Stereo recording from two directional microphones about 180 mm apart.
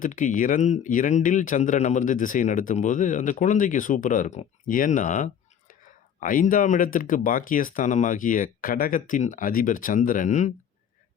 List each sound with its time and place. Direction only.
0.0 s speech: 45° left (ahead or behind)